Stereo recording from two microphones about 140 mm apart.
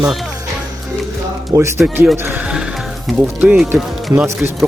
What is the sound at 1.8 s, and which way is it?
Speech, 10° right (ahead or behind).